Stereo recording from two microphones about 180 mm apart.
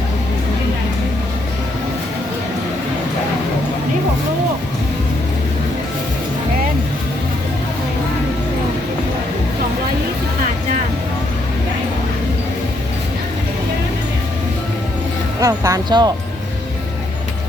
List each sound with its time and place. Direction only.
15.4 s music: 20° right (ahead or behind)